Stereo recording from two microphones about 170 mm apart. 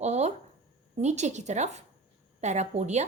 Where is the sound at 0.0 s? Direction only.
40° right (ahead or behind).